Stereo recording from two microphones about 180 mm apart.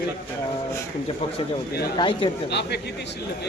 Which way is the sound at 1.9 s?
25° left (ahead or behind).